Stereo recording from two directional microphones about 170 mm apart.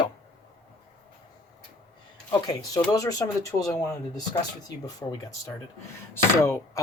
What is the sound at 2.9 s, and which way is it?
Speech, 20° left (ahead or behind).